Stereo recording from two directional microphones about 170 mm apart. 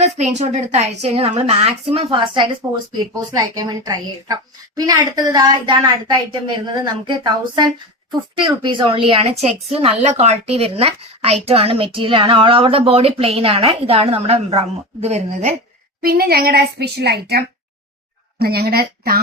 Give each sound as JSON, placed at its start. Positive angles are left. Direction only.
{"t": 0.0, "sound": "a woman's voice", "side_deg": -40}
{"t": 16.0, "sound": "a woman's voice", "side_deg": -60}